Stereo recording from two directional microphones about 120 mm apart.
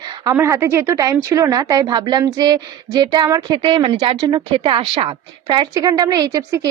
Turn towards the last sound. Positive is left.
turn(degrees=-30)  # may be behind; listen again after turning